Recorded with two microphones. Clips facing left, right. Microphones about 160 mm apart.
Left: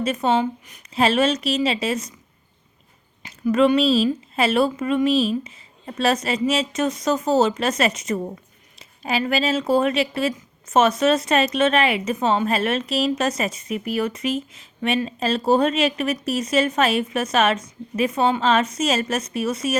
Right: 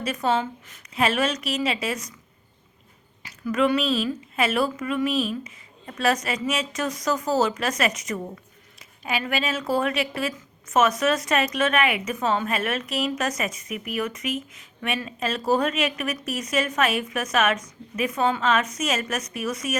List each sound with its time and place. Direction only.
0.0 s speech: 25° left (ahead or behind)
3.2 s speech: 25° left (ahead or behind)